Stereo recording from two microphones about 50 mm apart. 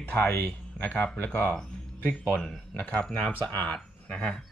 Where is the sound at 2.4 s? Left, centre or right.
Centre.